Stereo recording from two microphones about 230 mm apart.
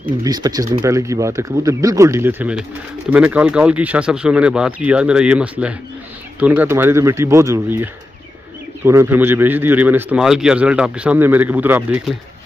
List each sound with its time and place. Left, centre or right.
0.2 s a man's voice: centre